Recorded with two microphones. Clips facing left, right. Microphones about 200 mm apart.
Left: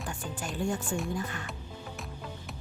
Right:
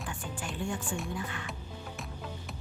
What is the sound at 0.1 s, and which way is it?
Music, 40° left (ahead or behind).